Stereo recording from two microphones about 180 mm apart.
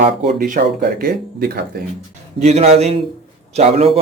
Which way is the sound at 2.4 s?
35° right (ahead or behind).